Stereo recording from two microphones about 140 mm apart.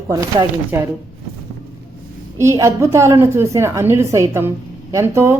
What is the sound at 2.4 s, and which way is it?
A woman's voice, 20° right (ahead or behind).